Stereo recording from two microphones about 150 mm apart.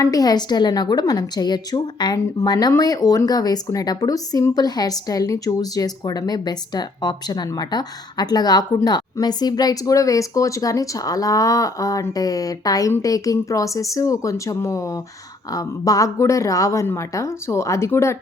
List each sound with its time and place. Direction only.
0.0 s a woman's voice: 25° left (ahead or behind)